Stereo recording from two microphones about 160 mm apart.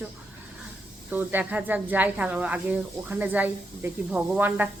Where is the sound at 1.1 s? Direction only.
10° right (ahead or behind).